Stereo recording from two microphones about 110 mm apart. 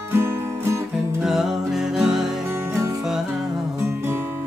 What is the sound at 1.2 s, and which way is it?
Music, 5° right (ahead or behind).